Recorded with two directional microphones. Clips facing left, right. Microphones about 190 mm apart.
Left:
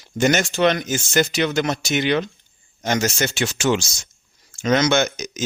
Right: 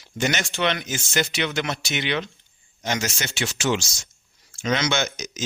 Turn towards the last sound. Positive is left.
turn(degrees=55)  # may be behind; listen again after turning